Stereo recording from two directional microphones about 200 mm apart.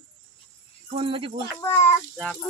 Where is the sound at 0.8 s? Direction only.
25° right (ahead or behind).